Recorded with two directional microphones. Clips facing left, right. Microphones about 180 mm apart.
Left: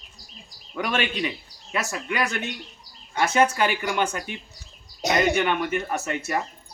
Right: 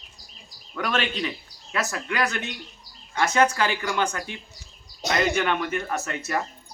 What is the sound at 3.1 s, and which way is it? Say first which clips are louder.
Speech: left 1 dB; 20° left (ahead or behind).